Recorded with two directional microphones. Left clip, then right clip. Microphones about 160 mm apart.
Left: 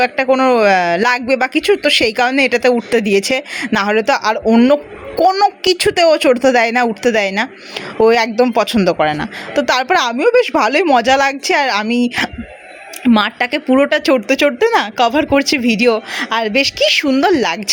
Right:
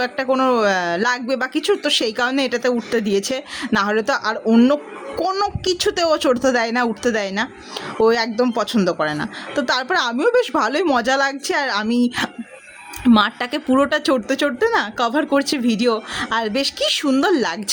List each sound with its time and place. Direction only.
0.0 s speech: 10° left (ahead or behind)
3.0 s speech: 35° right (ahead or behind)
3.2 s speech: 15° left (ahead or behind)